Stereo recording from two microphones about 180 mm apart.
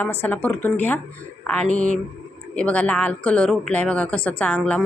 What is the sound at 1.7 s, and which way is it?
Speech, 45° right (ahead or behind).